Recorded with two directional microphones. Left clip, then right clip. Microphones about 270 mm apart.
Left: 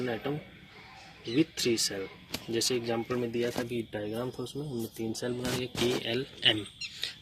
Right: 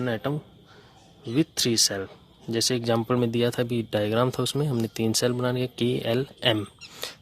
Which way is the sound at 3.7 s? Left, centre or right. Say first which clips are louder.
Right 10 dB; right.